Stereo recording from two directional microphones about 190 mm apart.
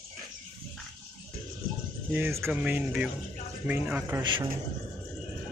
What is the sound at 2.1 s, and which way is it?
Speech, 10° right (ahead or behind).